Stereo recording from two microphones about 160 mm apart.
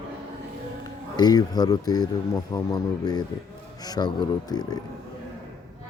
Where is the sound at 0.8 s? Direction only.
25° left (ahead or behind).